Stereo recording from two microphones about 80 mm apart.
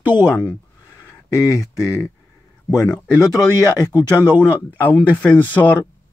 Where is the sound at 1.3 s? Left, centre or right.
Left.